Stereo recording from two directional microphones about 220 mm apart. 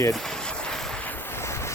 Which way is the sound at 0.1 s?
Centre (ahead or behind).